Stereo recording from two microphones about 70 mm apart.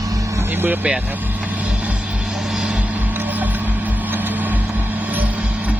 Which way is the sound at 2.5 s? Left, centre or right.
Centre.